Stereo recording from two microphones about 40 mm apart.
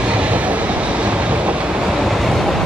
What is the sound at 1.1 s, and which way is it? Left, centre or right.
Vehicle, right.